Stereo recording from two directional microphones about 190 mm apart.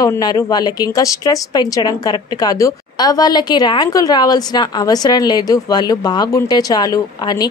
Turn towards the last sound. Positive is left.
turn(degrees=20)  # may be behind; listen again after turning